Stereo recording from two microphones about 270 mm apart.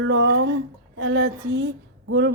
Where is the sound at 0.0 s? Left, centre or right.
Right.